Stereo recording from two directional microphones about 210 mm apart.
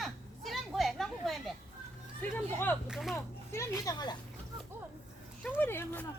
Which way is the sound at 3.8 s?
20° left (ahead or behind).